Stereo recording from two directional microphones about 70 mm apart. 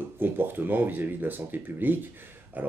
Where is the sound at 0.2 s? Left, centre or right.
Right.